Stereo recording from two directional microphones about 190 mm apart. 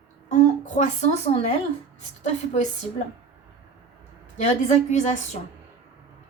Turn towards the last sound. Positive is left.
turn(degrees=40)  # may be behind; listen again after turning